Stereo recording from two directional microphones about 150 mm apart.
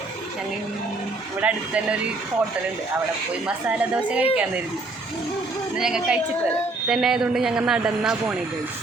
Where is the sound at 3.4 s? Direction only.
5° right (ahead or behind).